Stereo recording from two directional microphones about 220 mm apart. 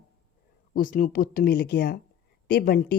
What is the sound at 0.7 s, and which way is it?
Speech, 40° left (ahead or behind).